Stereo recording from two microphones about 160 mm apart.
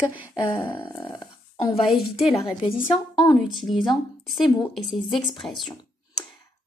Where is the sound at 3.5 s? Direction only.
Centre (ahead or behind).